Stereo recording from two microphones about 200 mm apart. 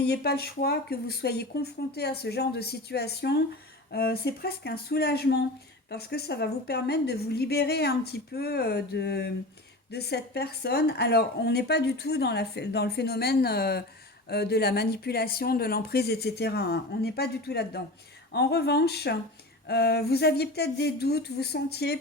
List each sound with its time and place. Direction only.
0.0 s speech: 55° left (ahead or behind)